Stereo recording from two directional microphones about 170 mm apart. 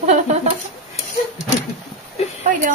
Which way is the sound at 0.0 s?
45° right (ahead or behind).